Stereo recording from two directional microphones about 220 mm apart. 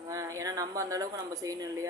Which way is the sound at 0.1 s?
15° right (ahead or behind).